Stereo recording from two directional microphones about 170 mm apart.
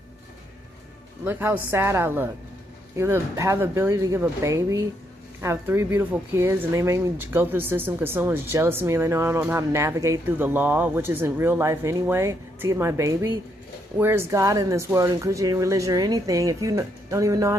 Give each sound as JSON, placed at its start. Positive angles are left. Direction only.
{"t": 1.2, "sound": "speech", "side_deg": -10}